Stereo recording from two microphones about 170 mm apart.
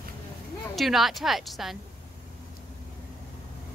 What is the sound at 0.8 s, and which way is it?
A woman's voice, centre (ahead or behind).